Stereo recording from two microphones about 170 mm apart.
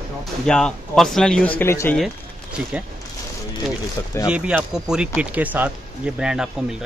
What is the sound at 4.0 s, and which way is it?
Speech, 20° left (ahead or behind).